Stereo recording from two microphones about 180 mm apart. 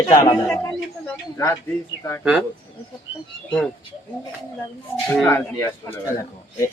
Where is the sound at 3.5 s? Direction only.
Centre (ahead or behind).